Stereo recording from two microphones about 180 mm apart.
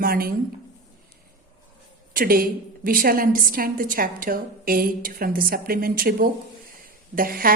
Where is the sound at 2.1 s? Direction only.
55° right (ahead or behind).